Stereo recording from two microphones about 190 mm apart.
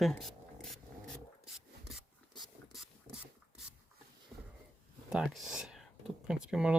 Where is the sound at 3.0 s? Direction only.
10° right (ahead or behind).